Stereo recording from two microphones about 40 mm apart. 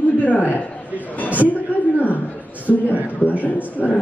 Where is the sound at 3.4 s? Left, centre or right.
Left.